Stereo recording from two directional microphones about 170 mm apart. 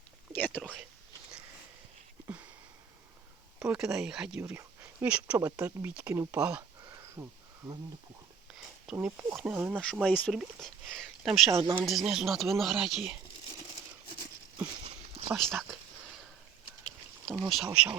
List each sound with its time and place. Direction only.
0.3 s whispering: 10° left (ahead or behind)
3.6 s speech: 5° right (ahead or behind)
8.4 s speech: 5° right (ahead or behind)
9.9 s speech: 5° left (ahead or behind)
14.8 s a sound: 35° right (ahead or behind)
15.3 s speech: centre (ahead or behind)
17.4 s speech: centre (ahead or behind)